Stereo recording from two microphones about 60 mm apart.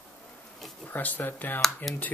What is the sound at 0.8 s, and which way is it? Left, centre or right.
Speech, left.